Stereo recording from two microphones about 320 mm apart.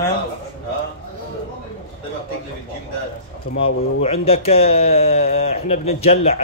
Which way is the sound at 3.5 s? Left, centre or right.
Centre.